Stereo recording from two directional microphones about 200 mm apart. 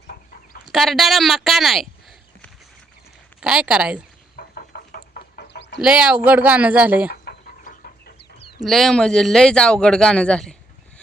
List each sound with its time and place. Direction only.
0.1 s chicken: 45° left (ahead or behind)
0.6 s speech: centre (ahead or behind)
3.4 s speech: 5° right (ahead or behind)
4.4 s a sound: 50° left (ahead or behind)
5.8 s speech: 5° right (ahead or behind)
7.1 s chicken: 50° left (ahead or behind)
8.6 s speech: centre (ahead or behind)